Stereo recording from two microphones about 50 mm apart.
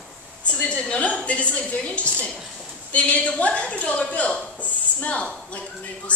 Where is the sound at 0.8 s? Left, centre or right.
Left.